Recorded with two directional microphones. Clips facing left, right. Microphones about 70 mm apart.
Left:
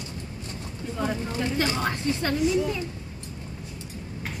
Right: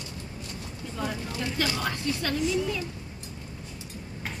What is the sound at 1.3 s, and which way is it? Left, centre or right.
A woman's voice, left.